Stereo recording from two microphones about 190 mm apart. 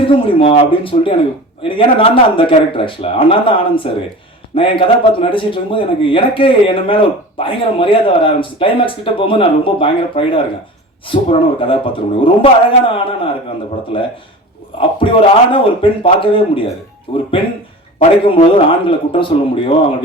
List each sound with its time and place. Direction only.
0.0 s a man's voice: 30° left (ahead or behind)
14.8 s a man's voice: 25° left (ahead or behind)
18.3 s a man's voice: 30° left (ahead or behind)